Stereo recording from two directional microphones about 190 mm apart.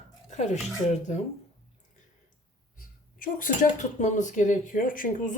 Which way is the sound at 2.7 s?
45° left (ahead or behind).